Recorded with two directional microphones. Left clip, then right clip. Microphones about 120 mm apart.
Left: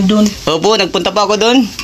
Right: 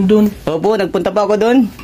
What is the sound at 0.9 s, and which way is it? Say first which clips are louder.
Speech: left 1 dB; 50° right (ahead or behind).